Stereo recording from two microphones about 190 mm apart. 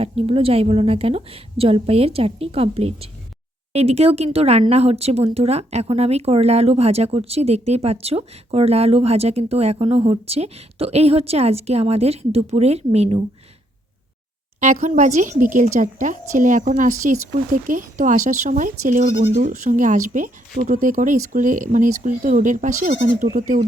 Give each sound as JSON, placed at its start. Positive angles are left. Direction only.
{"t": 0.0, "sound": "speech", "side_deg": -30}
{"t": 14.6, "sound": "speech", "side_deg": -40}